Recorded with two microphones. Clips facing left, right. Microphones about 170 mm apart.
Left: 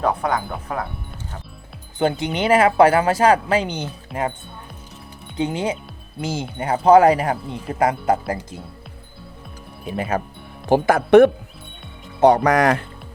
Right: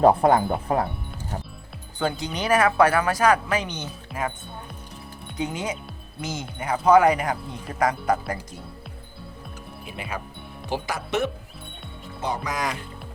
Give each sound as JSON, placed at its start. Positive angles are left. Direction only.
{"t": 0.0, "sound": "speech", "side_deg": -30}
{"t": 2.0, "sound": "speech", "side_deg": 25}
{"t": 5.4, "sound": "speech", "side_deg": 30}
{"t": 9.8, "sound": "speech", "side_deg": 40}
{"t": 12.2, "sound": "speech", "side_deg": 65}